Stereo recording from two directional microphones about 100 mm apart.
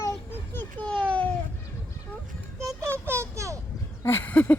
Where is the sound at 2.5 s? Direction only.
25° right (ahead or behind).